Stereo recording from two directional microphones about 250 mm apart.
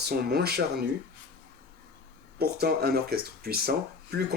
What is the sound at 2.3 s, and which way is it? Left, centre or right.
Speech, right.